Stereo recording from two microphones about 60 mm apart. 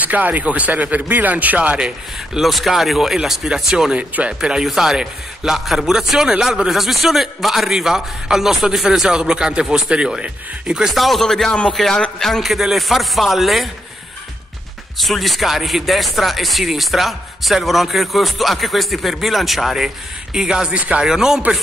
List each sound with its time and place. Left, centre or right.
0.0 s speech: right
2.4 s speech: centre
3.9 s speech: right
10.9 s speech: centre
15.0 s speech: centre
20.7 s speech: right
21.0 s speech: centre